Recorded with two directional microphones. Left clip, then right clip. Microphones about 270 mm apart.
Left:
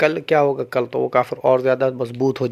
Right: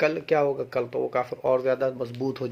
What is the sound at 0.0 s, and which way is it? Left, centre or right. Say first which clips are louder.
Speech: left 6 dB; left.